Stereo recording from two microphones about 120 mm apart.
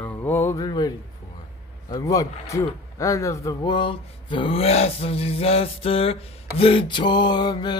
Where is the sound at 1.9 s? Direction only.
30° left (ahead or behind).